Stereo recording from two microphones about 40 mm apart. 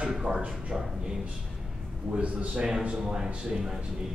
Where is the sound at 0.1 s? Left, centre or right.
Centre.